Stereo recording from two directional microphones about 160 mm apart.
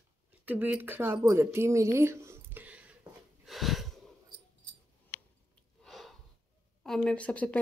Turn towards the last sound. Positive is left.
turn(degrees=10)  # may be behind; listen again after turning